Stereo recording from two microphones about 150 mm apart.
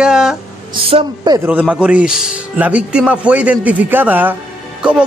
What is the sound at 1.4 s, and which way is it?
A man's voice, 10° right (ahead or behind).